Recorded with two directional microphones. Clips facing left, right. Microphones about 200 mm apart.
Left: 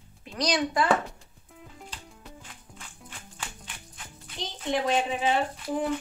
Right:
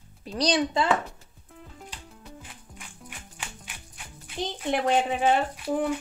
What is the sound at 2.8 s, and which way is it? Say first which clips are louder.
Music: right 2 dB; 10° right (ahead or behind).